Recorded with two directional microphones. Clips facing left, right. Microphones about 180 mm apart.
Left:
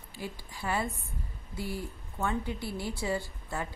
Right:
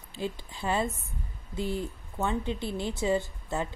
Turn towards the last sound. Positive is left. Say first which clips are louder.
# right 4 dB
turn(degrees=-20)  # may be behind; listen again after turning